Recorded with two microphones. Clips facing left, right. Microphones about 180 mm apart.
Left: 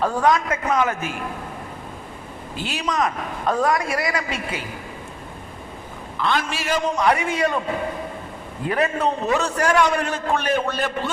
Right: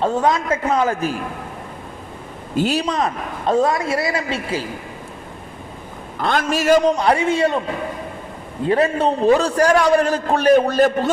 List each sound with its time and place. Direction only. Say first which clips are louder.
0.0 s a man's voice: right 1 dB; 25° right (ahead or behind)
2.6 s a man's voice: right 5 dB; 40° right (ahead or behind)
6.1 s a man's voice: right 4 dB; 45° right (ahead or behind); by 7.6 s 25° right (ahead or behind)
8.6 s a man's voice: right 5 dB; 30° right (ahead or behind)